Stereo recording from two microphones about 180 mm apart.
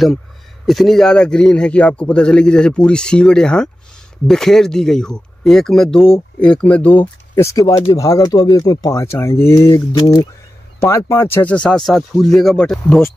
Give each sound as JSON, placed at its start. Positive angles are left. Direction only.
{"t": 0.7, "sound": "a man's voice", "side_deg": 0}